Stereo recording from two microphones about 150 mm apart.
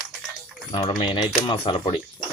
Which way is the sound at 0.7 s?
35° left (ahead or behind).